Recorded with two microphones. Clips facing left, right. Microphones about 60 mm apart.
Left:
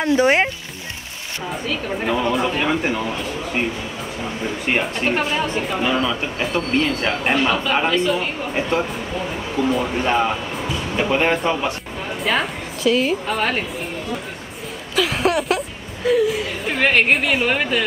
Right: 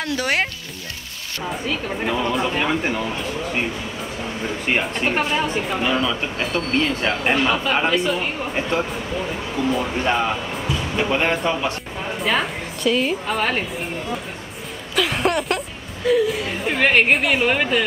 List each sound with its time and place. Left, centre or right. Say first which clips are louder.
0.0 s speech: left 6 dB; left
1.7 s speech: left 2 dB; centre
4.6 s a woman's voice: left 1 dB; centre
15.0 s music: left 1 dB; centre
16.6 s speech: even; centre